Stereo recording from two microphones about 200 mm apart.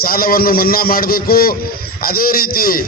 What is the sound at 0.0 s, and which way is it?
Speech, 50° left (ahead or behind).